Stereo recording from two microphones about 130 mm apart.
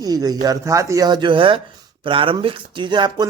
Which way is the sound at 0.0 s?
30° right (ahead or behind).